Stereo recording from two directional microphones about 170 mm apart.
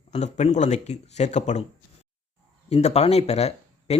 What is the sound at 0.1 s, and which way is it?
Speech, 40° left (ahead or behind).